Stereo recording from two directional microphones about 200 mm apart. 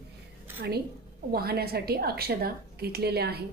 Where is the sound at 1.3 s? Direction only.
50° right (ahead or behind).